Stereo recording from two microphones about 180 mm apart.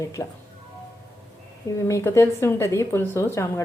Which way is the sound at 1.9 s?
15° left (ahead or behind).